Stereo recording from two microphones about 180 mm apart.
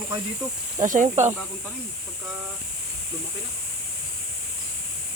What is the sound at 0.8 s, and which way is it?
Speech, 45° right (ahead or behind).